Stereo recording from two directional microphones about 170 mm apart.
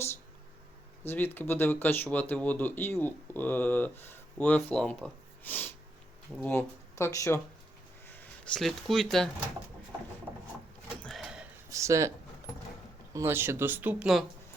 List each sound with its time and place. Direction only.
1.0 s speech: 10° left (ahead or behind)
11.0 s a sound: centre (ahead or behind)
11.7 s speech: 20° right (ahead or behind)
13.1 s speech: 15° right (ahead or behind)